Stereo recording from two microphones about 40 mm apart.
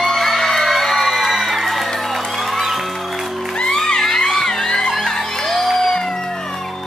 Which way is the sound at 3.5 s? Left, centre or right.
Centre.